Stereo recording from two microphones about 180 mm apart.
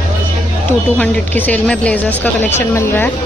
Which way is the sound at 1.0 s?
10° left (ahead or behind).